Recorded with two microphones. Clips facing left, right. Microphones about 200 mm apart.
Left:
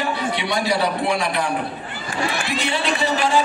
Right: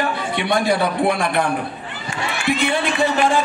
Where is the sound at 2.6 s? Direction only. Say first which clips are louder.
Right 2 dB; 50° right (ahead or behind).